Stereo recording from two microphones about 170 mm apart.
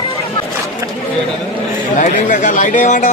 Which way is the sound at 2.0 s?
45° left (ahead or behind).